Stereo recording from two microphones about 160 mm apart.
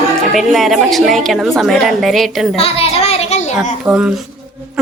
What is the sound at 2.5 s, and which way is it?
Child singing, 40° left (ahead or behind).